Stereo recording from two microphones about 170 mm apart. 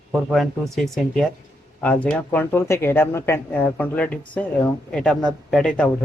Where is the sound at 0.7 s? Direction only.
Centre (ahead or behind).